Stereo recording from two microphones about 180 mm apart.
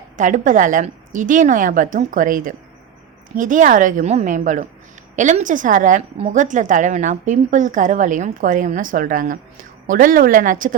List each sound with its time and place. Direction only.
0.2 s a woman's voice: 45° right (ahead or behind)